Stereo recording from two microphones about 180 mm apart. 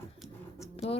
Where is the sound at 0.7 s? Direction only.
35° left (ahead or behind).